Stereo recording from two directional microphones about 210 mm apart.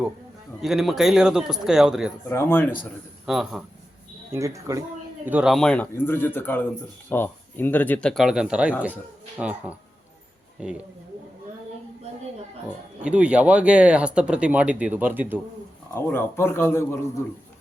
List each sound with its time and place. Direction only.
0.6 s speech: centre (ahead or behind)
2.3 s a man's voice: 10° left (ahead or behind)
3.2 s speech: centre (ahead or behind)
4.3 s a woman's voice: 15° right (ahead or behind)
13.0 s speech: 5° right (ahead or behind)
16.0 s a man's voice: 10° left (ahead or behind)